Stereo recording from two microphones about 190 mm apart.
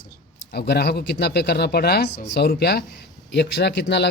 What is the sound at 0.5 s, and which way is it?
Speech, 55° left (ahead or behind).